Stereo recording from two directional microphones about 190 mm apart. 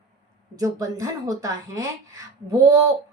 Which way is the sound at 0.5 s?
15° right (ahead or behind).